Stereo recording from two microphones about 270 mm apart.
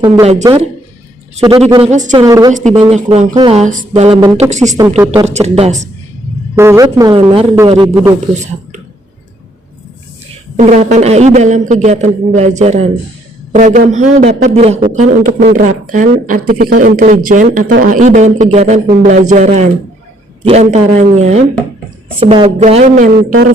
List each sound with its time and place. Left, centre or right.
0.0 s a man's voice: centre
2.2 s speech: centre
2.5 s a man's voice: right
6.6 s speech: centre
10.6 s a man's voice: right